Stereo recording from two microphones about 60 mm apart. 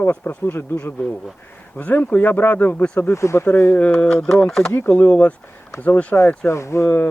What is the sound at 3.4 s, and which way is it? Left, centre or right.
Speech, left.